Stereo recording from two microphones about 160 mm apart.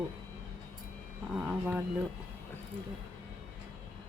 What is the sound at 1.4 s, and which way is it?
Speech, 10° right (ahead or behind).